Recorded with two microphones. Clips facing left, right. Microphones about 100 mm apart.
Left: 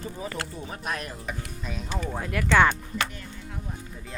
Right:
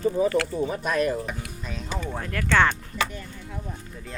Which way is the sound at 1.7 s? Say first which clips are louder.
Even; 5° left (ahead or behind).